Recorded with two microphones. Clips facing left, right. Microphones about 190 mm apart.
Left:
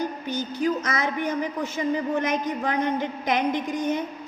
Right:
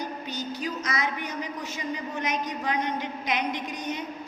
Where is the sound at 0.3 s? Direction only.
50° left (ahead or behind).